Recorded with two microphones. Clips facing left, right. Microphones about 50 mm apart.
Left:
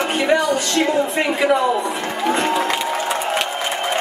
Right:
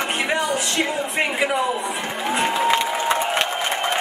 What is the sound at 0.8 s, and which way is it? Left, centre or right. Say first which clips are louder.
Speech: left 5 dB; centre.